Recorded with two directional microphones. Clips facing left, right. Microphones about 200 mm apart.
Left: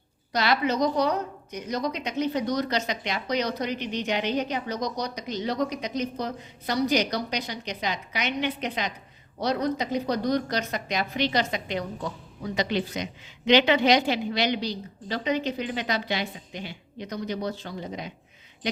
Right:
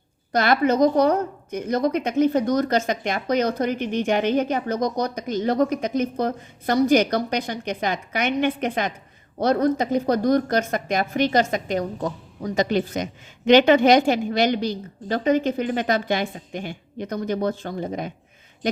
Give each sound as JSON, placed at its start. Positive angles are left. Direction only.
{"t": 0.3, "sound": "a woman's voice", "side_deg": -50}